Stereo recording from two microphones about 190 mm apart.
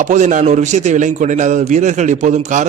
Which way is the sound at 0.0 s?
40° right (ahead or behind).